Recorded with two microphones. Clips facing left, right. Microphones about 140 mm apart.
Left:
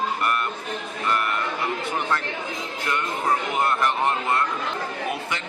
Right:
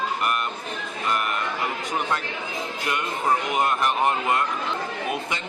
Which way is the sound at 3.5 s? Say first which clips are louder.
Even; 15° right (ahead or behind).